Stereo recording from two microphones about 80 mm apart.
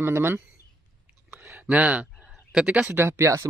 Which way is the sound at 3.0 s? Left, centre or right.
Right.